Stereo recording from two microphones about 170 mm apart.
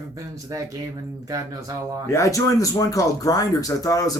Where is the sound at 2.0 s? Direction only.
15° left (ahead or behind).